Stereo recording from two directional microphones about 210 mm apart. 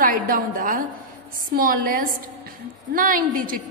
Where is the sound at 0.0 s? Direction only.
40° right (ahead or behind).